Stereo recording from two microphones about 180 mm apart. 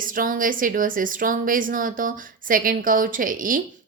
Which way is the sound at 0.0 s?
50° right (ahead or behind).